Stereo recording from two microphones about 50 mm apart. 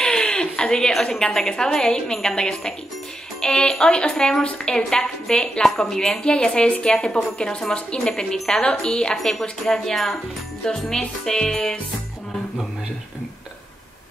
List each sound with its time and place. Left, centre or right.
0.0 s a sound: centre
1.5 s a woman's voice: centre
6.2 s speech: centre
10.6 s speech: centre